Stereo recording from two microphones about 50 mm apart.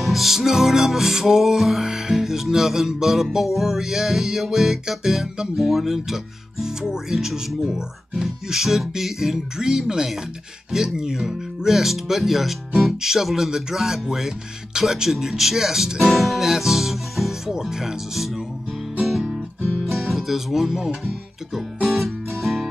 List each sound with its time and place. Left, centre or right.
0.0 s music: centre
10.7 s speech: centre
13.5 s music: centre
19.8 s speech: centre
21.8 s music: centre